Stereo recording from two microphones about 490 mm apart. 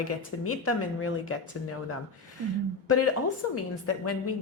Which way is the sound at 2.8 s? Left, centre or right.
Left.